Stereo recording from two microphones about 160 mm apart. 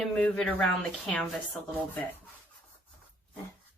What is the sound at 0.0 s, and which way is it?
Speech, 5° left (ahead or behind).